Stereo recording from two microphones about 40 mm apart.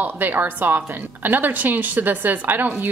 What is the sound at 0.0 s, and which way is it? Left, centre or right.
A woman's voice, right.